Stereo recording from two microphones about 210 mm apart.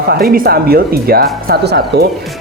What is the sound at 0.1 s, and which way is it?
Speech, 45° right (ahead or behind).